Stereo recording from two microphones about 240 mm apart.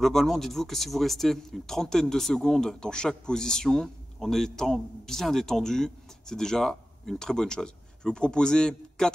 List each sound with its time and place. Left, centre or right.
0.0 s speech: centre